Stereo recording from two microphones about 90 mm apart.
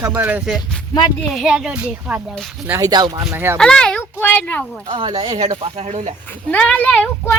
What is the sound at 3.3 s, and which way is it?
Speech, 25° right (ahead or behind).